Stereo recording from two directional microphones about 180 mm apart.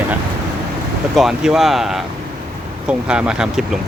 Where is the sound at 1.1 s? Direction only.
5° right (ahead or behind).